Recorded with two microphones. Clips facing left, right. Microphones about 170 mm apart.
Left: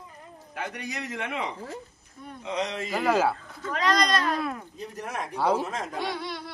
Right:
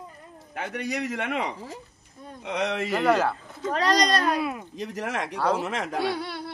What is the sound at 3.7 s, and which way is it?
Speech, 35° right (ahead or behind).